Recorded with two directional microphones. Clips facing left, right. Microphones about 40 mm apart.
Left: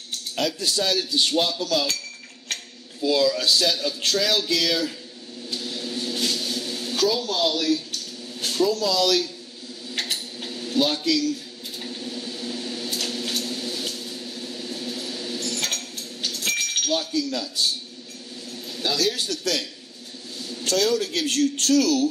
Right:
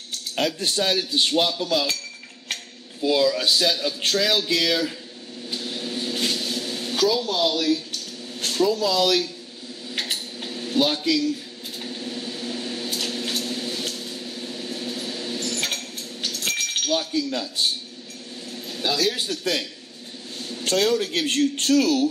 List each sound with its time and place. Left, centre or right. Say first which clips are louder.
0.4 s a man's voice: right 1 dB; right
0.9 s cutlery: right 1 dB; centre
2.5 s cutlery: right 1 dB; centre
3.0 s speech: right 1 dB; centre
5.5 s vehicle: right 1 dB; right
7.0 s speech: right 1 dB; centre
8.5 s speech: right 1 dB; centre
10.0 s dishes: right 1 dB; centre
11.8 s a sound: right 1 dB; centre
16.5 s glass: right 1 dB; centre
17.1 s cutlery: right 1 dB; right
18.8 s cutlery: right 1 dB; centre
20.6 s a man's voice: right 1 dB; right